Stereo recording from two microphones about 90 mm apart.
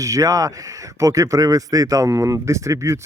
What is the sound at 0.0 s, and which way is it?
A man's voice, 40° right (ahead or behind).